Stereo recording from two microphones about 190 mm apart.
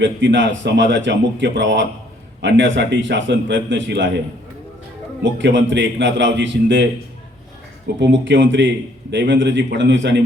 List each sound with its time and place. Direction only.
0.0 s a man's voice: 75° right (ahead or behind)
5.2 s a man's voice: 75° right (ahead or behind)
7.9 s a man's voice: 75° right (ahead or behind)